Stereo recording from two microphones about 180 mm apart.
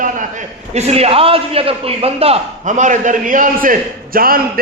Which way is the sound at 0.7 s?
35° right (ahead or behind).